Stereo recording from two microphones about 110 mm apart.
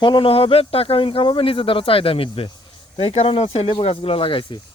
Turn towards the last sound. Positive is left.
turn(degrees=50)  # may be behind; listen again after turning